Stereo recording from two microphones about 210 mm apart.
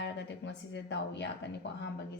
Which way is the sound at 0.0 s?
55° left (ahead or behind).